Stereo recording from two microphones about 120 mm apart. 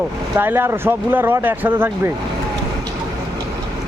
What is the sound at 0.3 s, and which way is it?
Speech, 20° right (ahead or behind).